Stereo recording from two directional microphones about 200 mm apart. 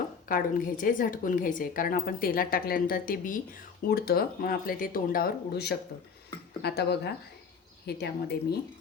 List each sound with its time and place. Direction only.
0.3 s a woman's voice: 45° left (ahead or behind)